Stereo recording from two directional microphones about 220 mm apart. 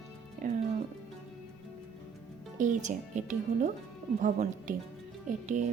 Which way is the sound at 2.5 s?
35° right (ahead or behind).